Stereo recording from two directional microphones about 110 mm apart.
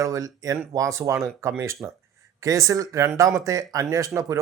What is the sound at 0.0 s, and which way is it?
Speech, 30° right (ahead or behind).